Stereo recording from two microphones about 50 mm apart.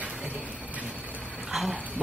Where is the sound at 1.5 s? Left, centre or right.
Centre.